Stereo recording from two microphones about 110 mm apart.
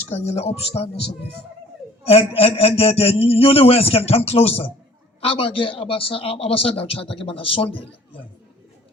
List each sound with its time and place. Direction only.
0.1 s speech: 75° left (ahead or behind)
2.0 s a man's voice: 65° left (ahead or behind)